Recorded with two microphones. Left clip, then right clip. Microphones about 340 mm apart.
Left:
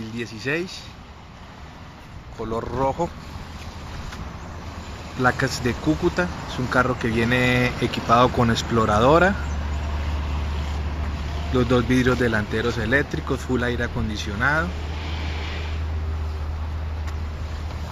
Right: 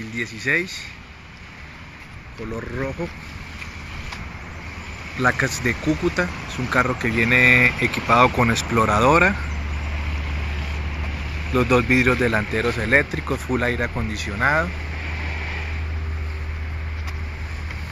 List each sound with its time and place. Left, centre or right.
0.2 s speech: centre
2.5 s speech: centre
5.2 s speech: centre
11.5 s speech: centre